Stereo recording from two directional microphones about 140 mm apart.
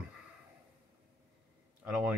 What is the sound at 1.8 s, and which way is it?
Speech, 10° right (ahead or behind).